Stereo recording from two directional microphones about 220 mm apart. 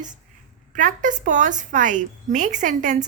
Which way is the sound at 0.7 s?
35° right (ahead or behind).